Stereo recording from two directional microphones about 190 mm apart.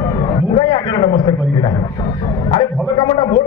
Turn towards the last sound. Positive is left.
turn(degrees=25)  # may be behind; listen again after turning